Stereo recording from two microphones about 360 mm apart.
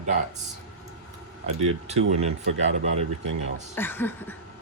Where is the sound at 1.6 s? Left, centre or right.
Centre.